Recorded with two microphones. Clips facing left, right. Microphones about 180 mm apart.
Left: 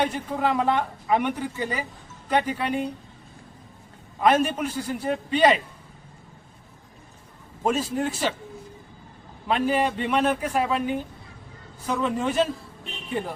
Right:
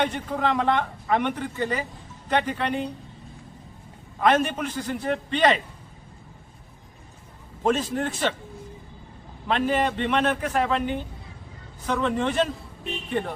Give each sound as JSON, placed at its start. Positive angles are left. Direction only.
{"t": 0.0, "sound": "speech", "side_deg": 10}
{"t": 4.2, "sound": "speech", "side_deg": 10}
{"t": 7.6, "sound": "speech", "side_deg": 10}
{"t": 9.5, "sound": "speech", "side_deg": 10}